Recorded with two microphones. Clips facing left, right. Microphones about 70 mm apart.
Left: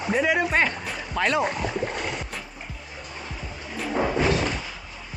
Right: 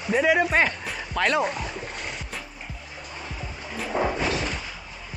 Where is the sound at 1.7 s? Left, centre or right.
Left.